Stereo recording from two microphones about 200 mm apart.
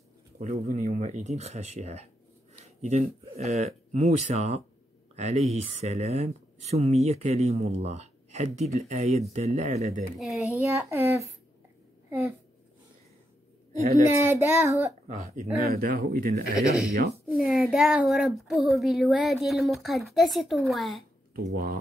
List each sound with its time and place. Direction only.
0.4 s speech: 35° right (ahead or behind)
10.1 s speech: centre (ahead or behind)
10.6 s child singing: 15° right (ahead or behind)
12.1 s a woman's voice: 15° right (ahead or behind)
14.1 s child singing: 10° right (ahead or behind)
15.0 s speech: 40° right (ahead or behind)
17.3 s speech: centre (ahead or behind)
21.5 s speech: 50° right (ahead or behind)